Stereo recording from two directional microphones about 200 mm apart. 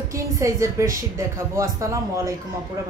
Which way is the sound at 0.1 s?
15° right (ahead or behind).